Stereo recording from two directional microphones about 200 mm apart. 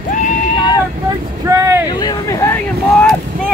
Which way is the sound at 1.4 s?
15° right (ahead or behind).